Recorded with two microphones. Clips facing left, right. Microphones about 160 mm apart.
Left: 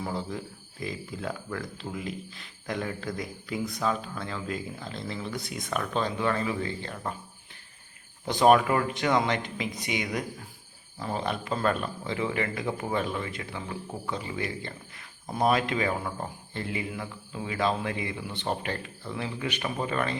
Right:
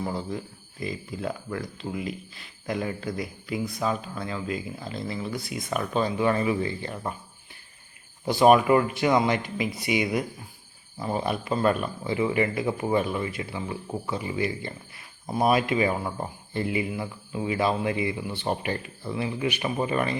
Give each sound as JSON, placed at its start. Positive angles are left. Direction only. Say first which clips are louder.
{"t": 0.0, "sound": "speech", "louder": "right 2 dB", "side_deg": 0}
{"t": 8.2, "sound": "speech", "louder": "right 2 dB", "side_deg": -10}